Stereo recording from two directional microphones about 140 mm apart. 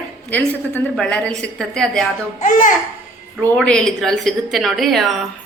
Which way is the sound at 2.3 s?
65° left (ahead or behind).